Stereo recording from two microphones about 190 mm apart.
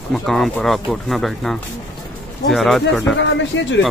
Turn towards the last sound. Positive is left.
turn(degrees=70)  # may be behind; listen again after turning